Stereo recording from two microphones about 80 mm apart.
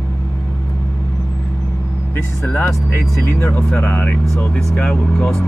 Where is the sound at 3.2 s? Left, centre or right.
Left.